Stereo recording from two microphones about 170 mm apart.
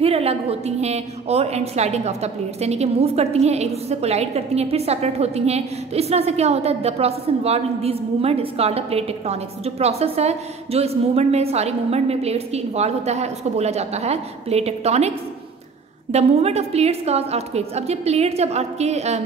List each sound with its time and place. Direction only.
0.0 s a woman's voice: 35° right (ahead or behind)